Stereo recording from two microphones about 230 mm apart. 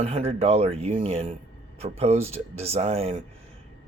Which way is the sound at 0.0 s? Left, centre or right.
Right.